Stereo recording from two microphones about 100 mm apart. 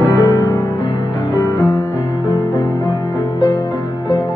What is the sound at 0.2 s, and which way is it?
Music, 30° left (ahead or behind).